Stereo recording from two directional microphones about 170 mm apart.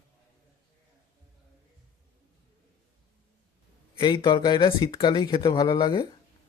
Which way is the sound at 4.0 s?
25° left (ahead or behind).